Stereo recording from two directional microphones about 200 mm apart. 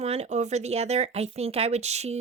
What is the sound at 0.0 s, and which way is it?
Speech, 30° right (ahead or behind).